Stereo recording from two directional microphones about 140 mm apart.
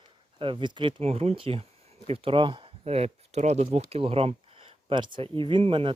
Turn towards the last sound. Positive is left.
turn(degrees=-40)  # may be behind; listen again after turning